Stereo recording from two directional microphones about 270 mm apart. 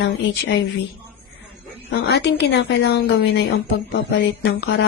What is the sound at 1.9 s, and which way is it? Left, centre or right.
Speech, left.